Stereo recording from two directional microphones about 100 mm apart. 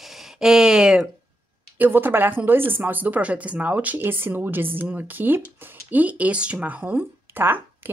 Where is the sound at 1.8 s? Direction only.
20° right (ahead or behind).